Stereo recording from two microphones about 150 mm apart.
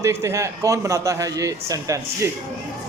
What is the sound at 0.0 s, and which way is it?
Speech, 20° right (ahead or behind).